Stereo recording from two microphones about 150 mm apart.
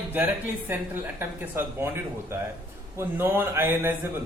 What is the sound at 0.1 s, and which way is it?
A man's voice, 10° right (ahead or behind).